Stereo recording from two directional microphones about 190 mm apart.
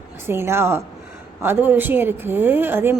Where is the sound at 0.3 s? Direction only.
10° right (ahead or behind).